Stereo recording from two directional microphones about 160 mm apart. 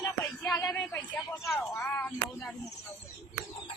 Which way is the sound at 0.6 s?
Centre (ahead or behind).